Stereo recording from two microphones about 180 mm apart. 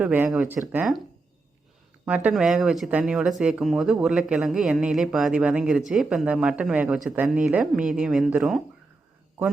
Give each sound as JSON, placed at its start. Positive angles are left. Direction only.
{"t": 0.0, "sound": "speech", "side_deg": -10}
{"t": 2.0, "sound": "speech", "side_deg": -5}